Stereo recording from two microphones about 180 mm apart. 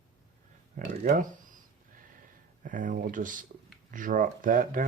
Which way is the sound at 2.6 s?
45° right (ahead or behind).